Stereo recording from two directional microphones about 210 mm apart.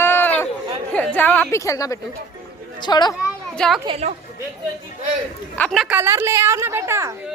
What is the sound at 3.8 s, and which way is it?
Speech, 30° right (ahead or behind).